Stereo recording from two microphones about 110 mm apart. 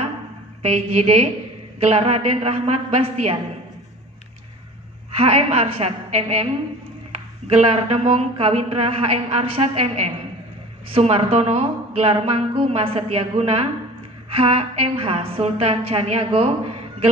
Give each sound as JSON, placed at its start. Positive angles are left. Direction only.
{"t": 0.6, "sound": "a woman's voice", "side_deg": -75}
{"t": 5.1, "sound": "a woman's voice", "side_deg": -75}
{"t": 7.4, "sound": "a woman's voice", "side_deg": -65}